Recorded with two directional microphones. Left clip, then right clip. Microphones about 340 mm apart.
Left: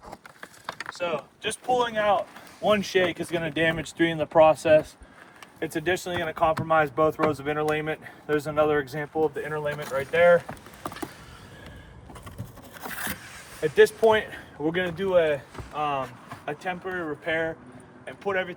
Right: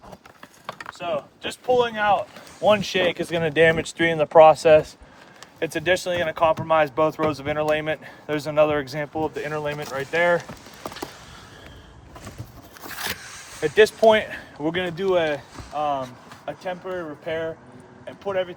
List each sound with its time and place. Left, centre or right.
1.4 s speech: centre
13.1 s a sound: centre
13.6 s speech: right
16.5 s speech: centre